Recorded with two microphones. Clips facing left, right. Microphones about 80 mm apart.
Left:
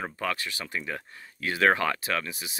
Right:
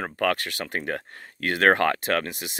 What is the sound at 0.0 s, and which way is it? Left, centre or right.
Speech, right.